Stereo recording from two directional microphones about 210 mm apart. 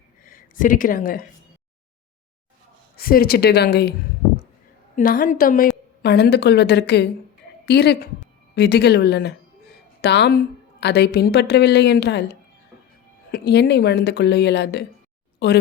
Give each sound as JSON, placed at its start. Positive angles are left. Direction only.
{"t": 0.3, "sound": "speech", "side_deg": 40}
{"t": 2.9, "sound": "a woman's voice", "side_deg": 45}
{"t": 4.9, "sound": "a woman's voice", "side_deg": 40}